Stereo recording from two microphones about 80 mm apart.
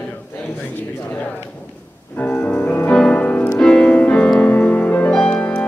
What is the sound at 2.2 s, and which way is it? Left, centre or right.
Music, left.